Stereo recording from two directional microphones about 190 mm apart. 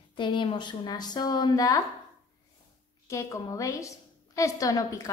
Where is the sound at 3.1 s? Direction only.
15° left (ahead or behind).